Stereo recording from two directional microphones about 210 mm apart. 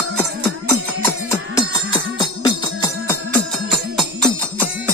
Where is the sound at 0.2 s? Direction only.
10° left (ahead or behind).